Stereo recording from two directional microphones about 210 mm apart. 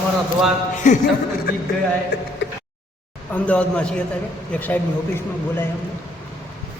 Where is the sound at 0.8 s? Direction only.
40° left (ahead or behind).